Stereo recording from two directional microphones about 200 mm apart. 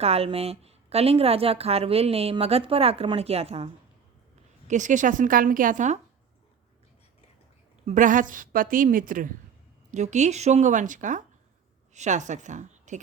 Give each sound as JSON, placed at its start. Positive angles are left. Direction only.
{"t": 0.0, "sound": "a woman's voice", "side_deg": -30}
{"t": 4.7, "sound": "a woman's voice", "side_deg": -40}
{"t": 7.9, "sound": "a woman's voice", "side_deg": -40}